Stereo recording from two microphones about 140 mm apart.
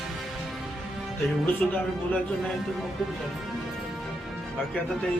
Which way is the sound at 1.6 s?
5° left (ahead or behind).